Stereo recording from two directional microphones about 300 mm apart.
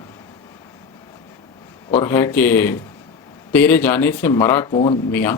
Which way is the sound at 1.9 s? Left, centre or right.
Centre.